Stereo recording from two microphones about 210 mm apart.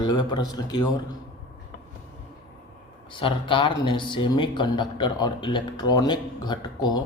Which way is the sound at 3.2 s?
25° left (ahead or behind).